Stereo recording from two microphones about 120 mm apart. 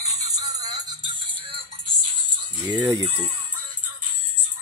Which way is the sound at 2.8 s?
30° right (ahead or behind).